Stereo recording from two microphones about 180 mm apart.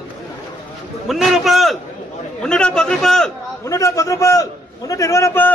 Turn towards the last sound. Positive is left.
turn(degrees=10)  # may be behind; listen again after turning